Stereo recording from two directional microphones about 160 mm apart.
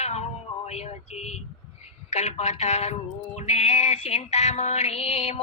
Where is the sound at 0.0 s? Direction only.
45° left (ahead or behind).